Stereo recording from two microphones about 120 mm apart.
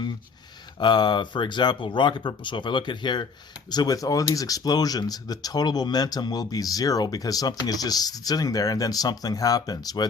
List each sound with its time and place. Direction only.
0.8 s speech: 40° left (ahead or behind)